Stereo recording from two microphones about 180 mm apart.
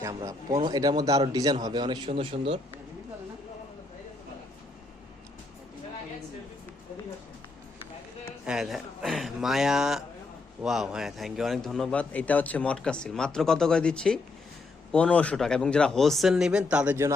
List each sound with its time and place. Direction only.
0.0 s speech: 20° right (ahead or behind)
8.4 s a man's voice: centre (ahead or behind)